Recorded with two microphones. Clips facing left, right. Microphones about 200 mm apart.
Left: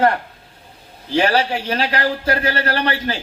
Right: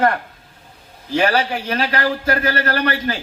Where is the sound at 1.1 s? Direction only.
30° left (ahead or behind).